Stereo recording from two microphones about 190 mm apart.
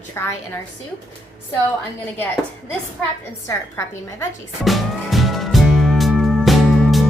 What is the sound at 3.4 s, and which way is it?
Speech, 15° left (ahead or behind).